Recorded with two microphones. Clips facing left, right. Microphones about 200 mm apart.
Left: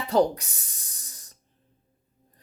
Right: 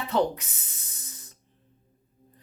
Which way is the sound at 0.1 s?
35° left (ahead or behind).